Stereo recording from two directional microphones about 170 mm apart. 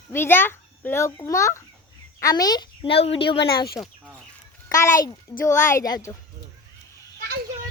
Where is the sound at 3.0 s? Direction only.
35° left (ahead or behind).